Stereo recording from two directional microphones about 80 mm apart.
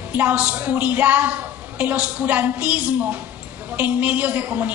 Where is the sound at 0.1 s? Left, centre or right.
Centre.